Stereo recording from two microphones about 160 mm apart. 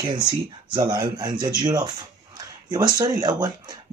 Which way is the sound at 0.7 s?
25° right (ahead or behind).